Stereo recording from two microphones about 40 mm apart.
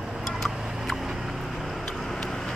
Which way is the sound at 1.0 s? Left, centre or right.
Centre.